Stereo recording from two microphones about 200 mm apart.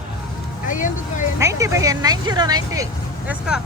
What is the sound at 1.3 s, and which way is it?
Speech, 15° right (ahead or behind).